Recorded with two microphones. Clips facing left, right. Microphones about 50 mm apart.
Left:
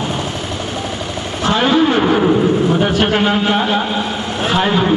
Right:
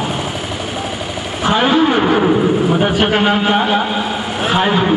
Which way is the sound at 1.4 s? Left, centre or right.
Centre.